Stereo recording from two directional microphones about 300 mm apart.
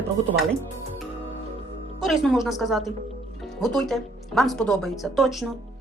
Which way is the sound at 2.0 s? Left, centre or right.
Centre.